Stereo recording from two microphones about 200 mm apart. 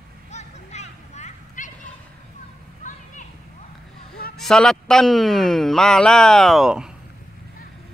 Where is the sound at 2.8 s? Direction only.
40° left (ahead or behind).